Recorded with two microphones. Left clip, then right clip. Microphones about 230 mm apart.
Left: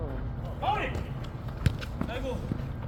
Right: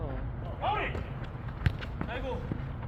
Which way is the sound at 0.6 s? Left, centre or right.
Centre.